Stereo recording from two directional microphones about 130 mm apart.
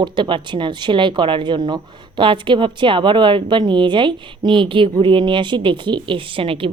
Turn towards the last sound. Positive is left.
turn(degrees=-45)  # may be behind; listen again after turning